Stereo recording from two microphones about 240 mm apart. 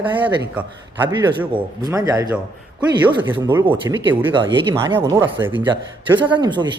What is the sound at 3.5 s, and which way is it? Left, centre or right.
Speech, centre.